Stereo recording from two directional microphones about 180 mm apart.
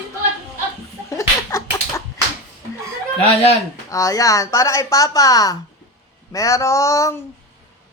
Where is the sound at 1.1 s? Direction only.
15° left (ahead or behind).